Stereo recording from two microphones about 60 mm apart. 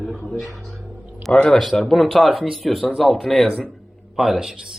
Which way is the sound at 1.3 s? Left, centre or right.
Centre.